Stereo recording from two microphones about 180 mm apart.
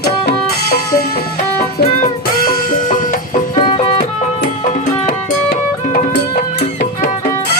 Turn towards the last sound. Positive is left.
turn(degrees=50)  # may be behind; listen again after turning